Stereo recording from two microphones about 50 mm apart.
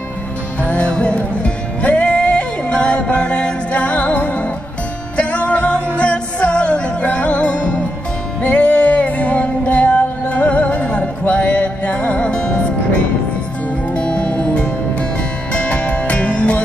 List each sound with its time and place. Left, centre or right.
0.7 s music: left
13.9 s music: left